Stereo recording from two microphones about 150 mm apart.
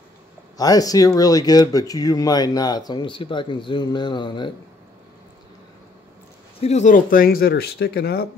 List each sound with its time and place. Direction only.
0.6 s speech: 25° left (ahead or behind)
6.6 s speech: 50° left (ahead or behind); by 8.3 s 90° left